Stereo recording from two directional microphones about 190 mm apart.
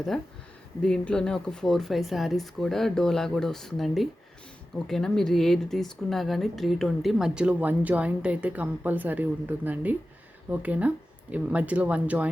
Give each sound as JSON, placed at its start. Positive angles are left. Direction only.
{"t": 0.1, "sound": "speech", "side_deg": 0}